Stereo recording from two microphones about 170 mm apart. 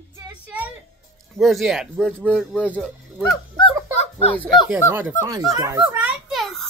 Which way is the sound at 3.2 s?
25° left (ahead or behind).